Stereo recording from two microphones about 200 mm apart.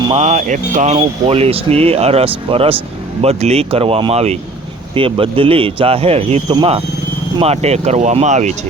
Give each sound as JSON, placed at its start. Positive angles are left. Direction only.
{"t": 0.1, "sound": "speech", "side_deg": -35}